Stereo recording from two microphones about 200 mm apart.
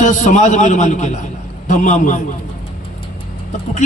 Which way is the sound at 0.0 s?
40° left (ahead or behind).